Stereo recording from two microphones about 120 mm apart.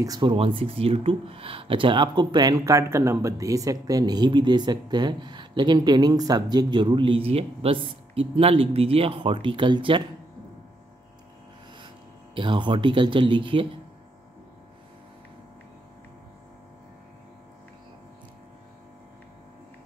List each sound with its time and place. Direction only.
0.2 s speech: 45° right (ahead or behind)
12.4 s speech: 45° right (ahead or behind)